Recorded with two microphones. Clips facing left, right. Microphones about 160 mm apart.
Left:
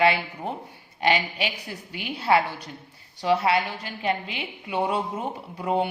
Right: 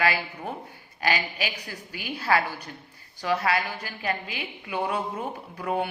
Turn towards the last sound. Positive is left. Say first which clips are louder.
# left 3 dB
turn(degrees=20)  # may be behind; listen again after turning